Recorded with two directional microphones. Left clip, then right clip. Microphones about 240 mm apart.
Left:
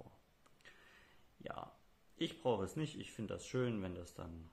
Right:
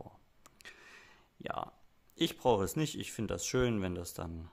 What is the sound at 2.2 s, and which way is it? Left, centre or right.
Speech, right.